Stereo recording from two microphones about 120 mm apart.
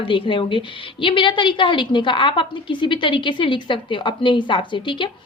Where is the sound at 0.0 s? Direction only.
45° left (ahead or behind).